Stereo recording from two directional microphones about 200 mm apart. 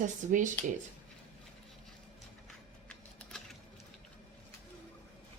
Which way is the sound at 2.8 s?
5° left (ahead or behind).